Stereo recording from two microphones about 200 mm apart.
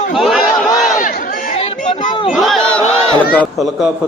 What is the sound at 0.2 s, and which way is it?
Crowd, centre (ahead or behind).